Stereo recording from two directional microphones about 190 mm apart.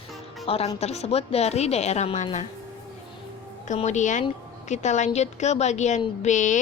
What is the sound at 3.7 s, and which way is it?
Speech, 40° left (ahead or behind).